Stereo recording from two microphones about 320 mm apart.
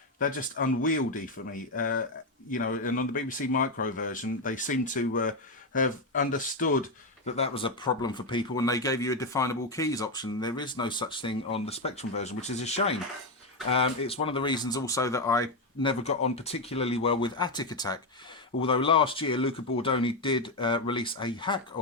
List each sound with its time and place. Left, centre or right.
0.2 s speech: left